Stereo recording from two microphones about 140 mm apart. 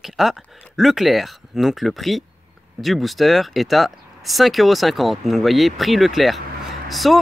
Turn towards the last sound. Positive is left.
turn(degrees=0)  # may be behind; listen again after turning